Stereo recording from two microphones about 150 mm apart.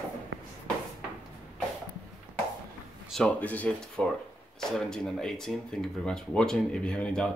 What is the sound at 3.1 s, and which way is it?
Speech, 10° left (ahead or behind).